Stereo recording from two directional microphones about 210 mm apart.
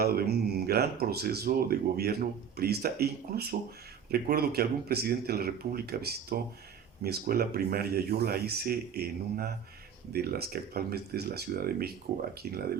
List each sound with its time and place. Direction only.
0.0 s speech: 45° right (ahead or behind)